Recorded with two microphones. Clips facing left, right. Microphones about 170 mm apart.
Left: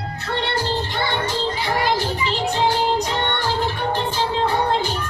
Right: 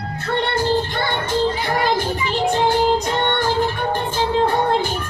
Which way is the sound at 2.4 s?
50° right (ahead or behind).